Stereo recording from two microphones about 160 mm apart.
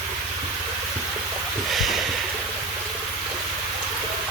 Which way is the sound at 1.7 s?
Centre (ahead or behind).